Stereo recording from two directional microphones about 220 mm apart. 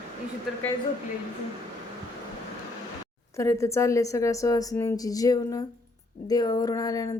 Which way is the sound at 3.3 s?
15° left (ahead or behind).